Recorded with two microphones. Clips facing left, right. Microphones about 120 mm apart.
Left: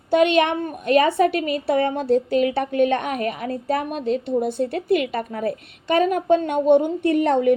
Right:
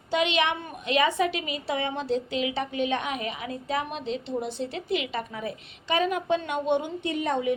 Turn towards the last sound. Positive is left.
turn(degrees=60)  # may be behind; listen again after turning